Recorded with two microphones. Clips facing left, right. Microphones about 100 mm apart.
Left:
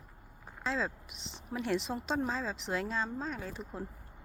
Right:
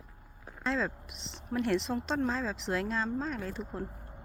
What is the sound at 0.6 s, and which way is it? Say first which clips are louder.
Speech: right 2 dB; centre (ahead or behind).